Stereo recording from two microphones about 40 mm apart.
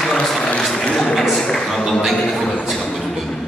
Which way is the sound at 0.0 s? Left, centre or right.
Centre.